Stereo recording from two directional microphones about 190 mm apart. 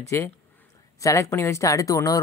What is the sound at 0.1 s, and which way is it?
Speech, 15° left (ahead or behind).